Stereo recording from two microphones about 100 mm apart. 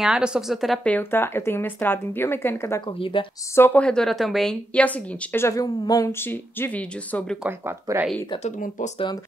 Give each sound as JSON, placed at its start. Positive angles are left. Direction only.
{"t": 0.0, "sound": "a woman's voice", "side_deg": -5}
{"t": 0.8, "sound": "speech", "side_deg": 20}
{"t": 3.0, "sound": "a woman's voice", "side_deg": 60}
{"t": 3.5, "sound": "speech", "side_deg": 20}
{"t": 3.8, "sound": "a woman's voice", "side_deg": 5}
{"t": 4.7, "sound": "speech", "side_deg": 15}
{"t": 6.1, "sound": "speech", "side_deg": 20}
{"t": 7.4, "sound": "speech", "side_deg": -20}